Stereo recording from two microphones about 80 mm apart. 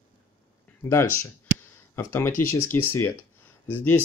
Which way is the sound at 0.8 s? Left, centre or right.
Left.